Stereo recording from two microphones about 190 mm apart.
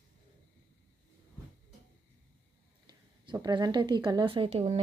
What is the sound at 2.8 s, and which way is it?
A woman's voice, 20° right (ahead or behind).